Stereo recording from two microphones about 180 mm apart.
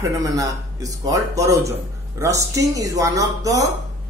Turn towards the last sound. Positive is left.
turn(degrees=-20)  # may be behind; listen again after turning